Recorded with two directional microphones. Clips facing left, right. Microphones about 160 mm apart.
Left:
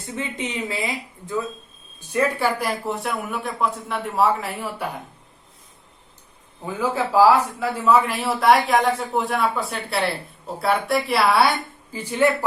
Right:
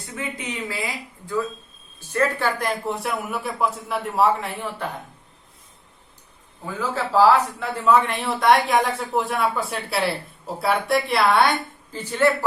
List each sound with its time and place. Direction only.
0.2 s speech: 25° left (ahead or behind)
2.0 s speech: 15° left (ahead or behind)
6.7 s speech: 10° left (ahead or behind)